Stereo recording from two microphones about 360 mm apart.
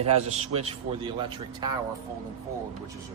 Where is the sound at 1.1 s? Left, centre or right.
Centre.